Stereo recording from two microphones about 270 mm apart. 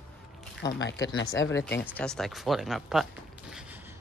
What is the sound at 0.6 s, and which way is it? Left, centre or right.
Speech, left.